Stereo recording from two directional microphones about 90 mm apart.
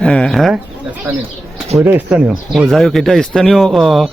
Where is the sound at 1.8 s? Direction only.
20° right (ahead or behind).